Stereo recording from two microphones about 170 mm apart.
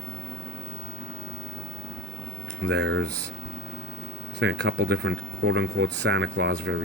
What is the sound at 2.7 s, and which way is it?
Speech, 90° right.